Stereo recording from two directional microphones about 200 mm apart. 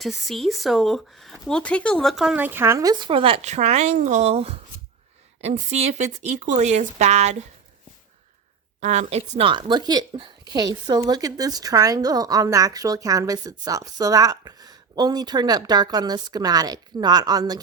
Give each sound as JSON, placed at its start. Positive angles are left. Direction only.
{"t": 0.0, "sound": "a woman's voice", "side_deg": 0}
{"t": 8.8, "sound": "a woman's voice", "side_deg": -35}